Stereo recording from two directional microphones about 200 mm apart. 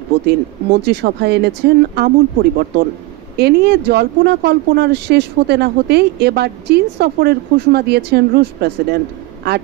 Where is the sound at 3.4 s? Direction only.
55° right (ahead or behind).